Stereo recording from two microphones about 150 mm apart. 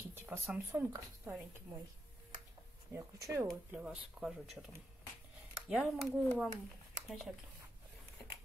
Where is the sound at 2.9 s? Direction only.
15° right (ahead or behind).